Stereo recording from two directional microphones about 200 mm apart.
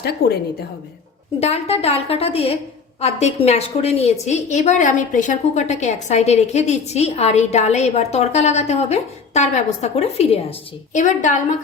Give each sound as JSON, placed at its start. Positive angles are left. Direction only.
{"t": 1.4, "sound": "a woman's voice", "side_deg": 30}